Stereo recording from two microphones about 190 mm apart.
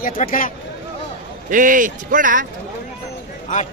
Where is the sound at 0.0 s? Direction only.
45° left (ahead or behind).